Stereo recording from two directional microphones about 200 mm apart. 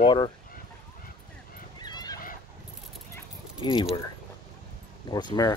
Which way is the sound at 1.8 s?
20° left (ahead or behind).